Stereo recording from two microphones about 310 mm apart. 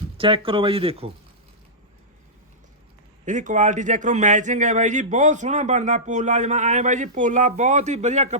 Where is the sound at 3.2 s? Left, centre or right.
Right.